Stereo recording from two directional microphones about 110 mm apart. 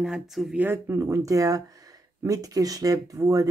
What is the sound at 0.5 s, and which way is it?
Speech, 20° right (ahead or behind).